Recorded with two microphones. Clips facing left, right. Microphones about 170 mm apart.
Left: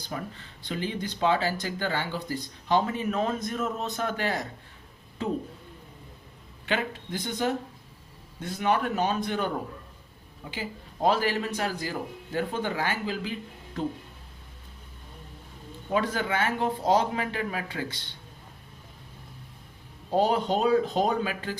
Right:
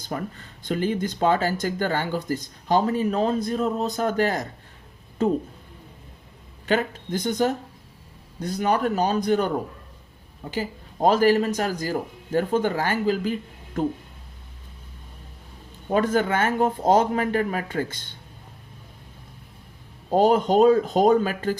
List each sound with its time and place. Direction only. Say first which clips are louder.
0.0 s speech: right 5 dB; 45° right (ahead or behind)
6.7 s a man's voice: right 6 dB; 40° right (ahead or behind)
10.5 s speech: right 7 dB; 45° right (ahead or behind)
15.9 s speech: right 6 dB; 45° right (ahead or behind)
20.1 s speech: right 7 dB; 45° right (ahead or behind)